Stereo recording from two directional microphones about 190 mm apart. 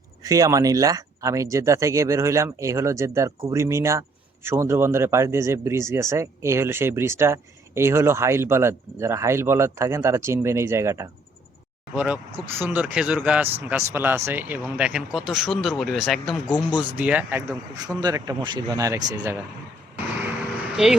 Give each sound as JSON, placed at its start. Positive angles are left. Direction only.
{"t": 0.2, "sound": "speech", "side_deg": -20}
{"t": 20.7, "sound": "speech", "side_deg": 0}